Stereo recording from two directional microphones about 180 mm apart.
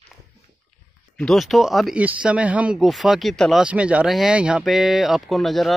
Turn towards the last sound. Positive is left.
turn(degrees=0)  # may be behind; listen again after turning